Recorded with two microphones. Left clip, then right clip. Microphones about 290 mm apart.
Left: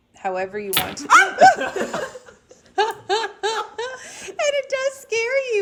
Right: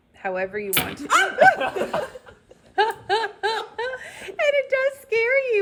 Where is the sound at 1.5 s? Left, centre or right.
Left.